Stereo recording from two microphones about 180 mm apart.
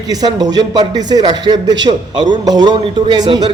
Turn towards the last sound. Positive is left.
turn(degrees=-25)  # may be behind; listen again after turning